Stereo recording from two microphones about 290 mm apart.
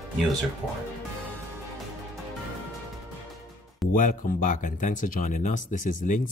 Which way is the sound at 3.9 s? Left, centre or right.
Left.